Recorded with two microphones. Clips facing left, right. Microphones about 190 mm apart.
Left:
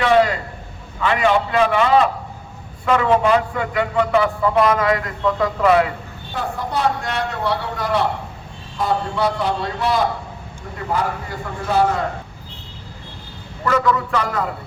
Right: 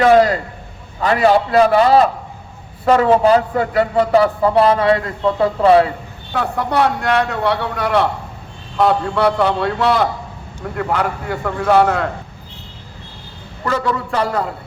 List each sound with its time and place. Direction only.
0.0 s a sound: 40° right (ahead or behind)
0.9 s a man's voice: 40° right (ahead or behind)
6.3 s a man's voice: 70° right (ahead or behind)
13.7 s a man's voice: 30° right (ahead or behind)